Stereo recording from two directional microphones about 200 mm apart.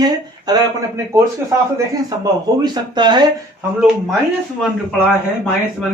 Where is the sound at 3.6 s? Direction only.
Centre (ahead or behind).